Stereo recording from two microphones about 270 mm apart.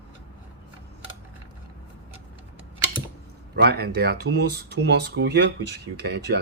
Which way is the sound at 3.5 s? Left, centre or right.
Right.